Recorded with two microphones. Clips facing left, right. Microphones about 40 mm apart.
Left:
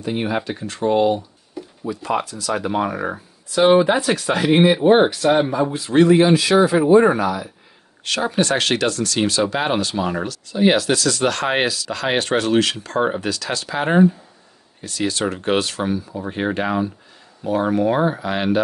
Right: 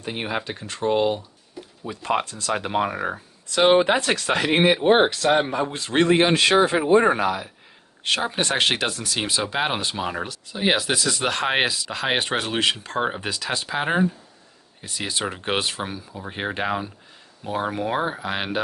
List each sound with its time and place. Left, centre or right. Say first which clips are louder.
0.0 s speech: left 5 dB; centre
1.9 s speech: left 2 dB; right
3.8 s speech: left 3 dB; right
8.2 s speech: left 5 dB; right